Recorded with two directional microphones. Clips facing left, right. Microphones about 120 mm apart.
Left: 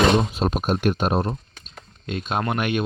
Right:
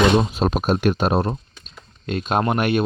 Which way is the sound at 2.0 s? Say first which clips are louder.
Right 4 dB; 45° right (ahead or behind).